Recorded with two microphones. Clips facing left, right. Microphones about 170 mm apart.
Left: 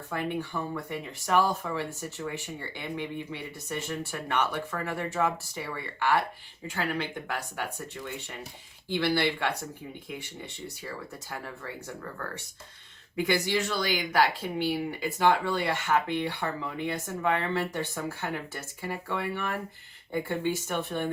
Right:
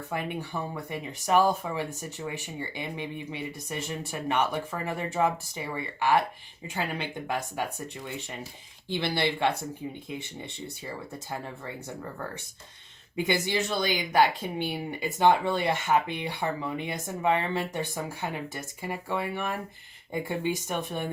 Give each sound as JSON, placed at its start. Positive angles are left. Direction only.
{"t": 0.1, "sound": "speech", "side_deg": -15}
{"t": 10.8, "sound": "speech", "side_deg": -20}
{"t": 13.1, "sound": "speech", "side_deg": -20}